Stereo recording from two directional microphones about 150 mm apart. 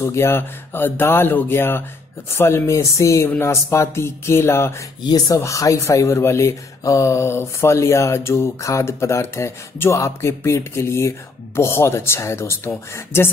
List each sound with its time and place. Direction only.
0.0 s speech: 15° left (ahead or behind)